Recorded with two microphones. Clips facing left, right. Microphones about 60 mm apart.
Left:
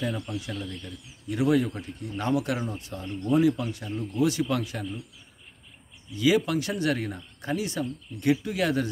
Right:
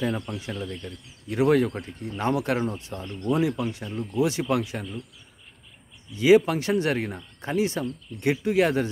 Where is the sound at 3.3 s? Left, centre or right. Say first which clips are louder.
Left 2 dB; right.